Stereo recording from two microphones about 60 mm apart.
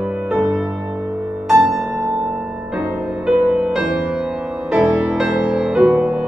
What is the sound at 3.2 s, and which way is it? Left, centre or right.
Music, right.